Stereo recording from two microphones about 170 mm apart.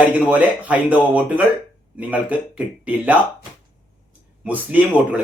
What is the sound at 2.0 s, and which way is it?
Speech, 10° right (ahead or behind).